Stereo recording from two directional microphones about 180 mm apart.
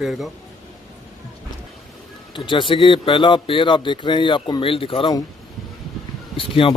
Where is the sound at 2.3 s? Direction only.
25° left (ahead or behind).